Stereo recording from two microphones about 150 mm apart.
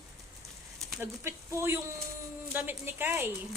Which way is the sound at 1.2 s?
15° right (ahead or behind).